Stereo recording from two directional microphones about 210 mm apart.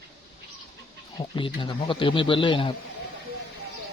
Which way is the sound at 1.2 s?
25° left (ahead or behind).